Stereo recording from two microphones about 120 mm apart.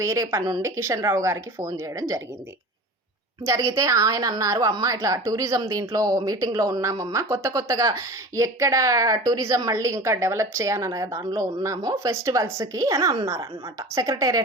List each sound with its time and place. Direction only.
0.0 s a woman's voice: 25° right (ahead or behind)
3.4 s a woman's voice: 25° right (ahead or behind)